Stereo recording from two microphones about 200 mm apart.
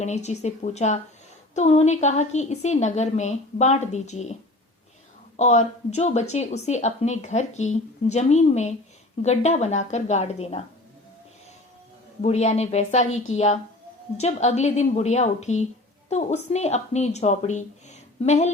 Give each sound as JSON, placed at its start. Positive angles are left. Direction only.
{"t": 0.0, "sound": "speech", "side_deg": 35}
{"t": 5.4, "sound": "speech", "side_deg": 35}
{"t": 12.2, "sound": "speech", "side_deg": 35}